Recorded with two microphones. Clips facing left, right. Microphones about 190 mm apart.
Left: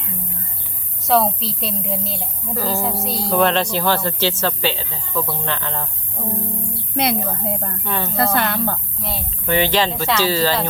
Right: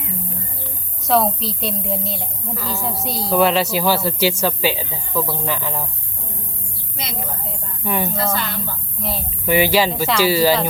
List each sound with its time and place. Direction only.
1.0 s a woman's voice: centre (ahead or behind)
2.6 s a woman's voice: 40° left (ahead or behind)
2.8 s a woman's voice: centre (ahead or behind)
6.9 s speech: 60° left (ahead or behind)
7.9 s a woman's voice: 15° right (ahead or behind)
8.1 s speech: 60° left (ahead or behind)
9.0 s a woman's voice: centre (ahead or behind)